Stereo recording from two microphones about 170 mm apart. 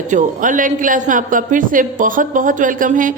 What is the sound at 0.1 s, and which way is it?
A woman's voice, 50° right (ahead or behind).